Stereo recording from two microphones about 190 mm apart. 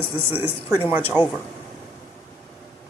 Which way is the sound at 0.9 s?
10° right (ahead or behind).